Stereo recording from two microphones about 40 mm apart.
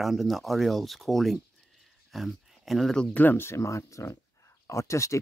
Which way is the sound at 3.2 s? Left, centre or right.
Left.